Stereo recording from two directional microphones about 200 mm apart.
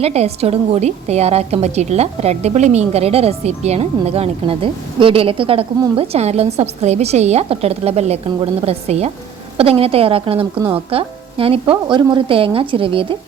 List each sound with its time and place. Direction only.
0.0 s a woman's voice: 30° right (ahead or behind)